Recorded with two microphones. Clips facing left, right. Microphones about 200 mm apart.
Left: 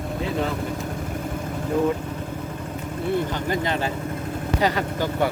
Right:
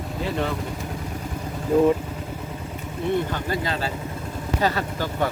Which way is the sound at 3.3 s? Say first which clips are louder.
Left 2 dB; 20° left (ahead or behind).